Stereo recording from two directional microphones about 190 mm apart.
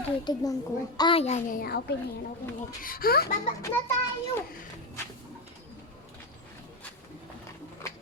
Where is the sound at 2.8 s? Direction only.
50° left (ahead or behind).